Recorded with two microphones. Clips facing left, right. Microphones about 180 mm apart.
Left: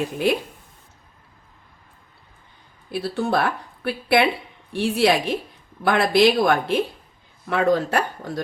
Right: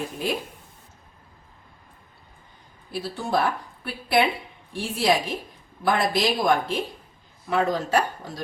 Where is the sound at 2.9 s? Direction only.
65° left (ahead or behind).